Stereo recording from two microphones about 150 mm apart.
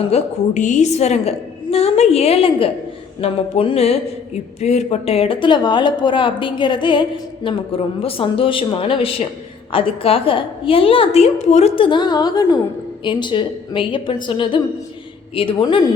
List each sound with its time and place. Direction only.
0.1 s a woman's voice: 50° left (ahead or behind); by 15.8 s 30° left (ahead or behind)